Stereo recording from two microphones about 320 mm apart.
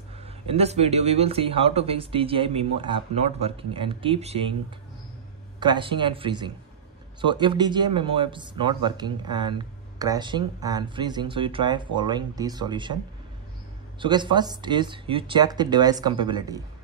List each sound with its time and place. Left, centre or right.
0.2 s speech: centre
5.6 s speech: centre